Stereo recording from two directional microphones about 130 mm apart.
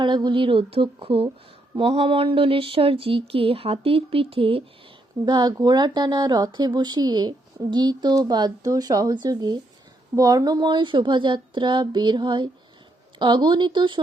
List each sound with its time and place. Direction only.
0.0 s speech: 35° right (ahead or behind)
5.2 s speech: 35° right (ahead or behind)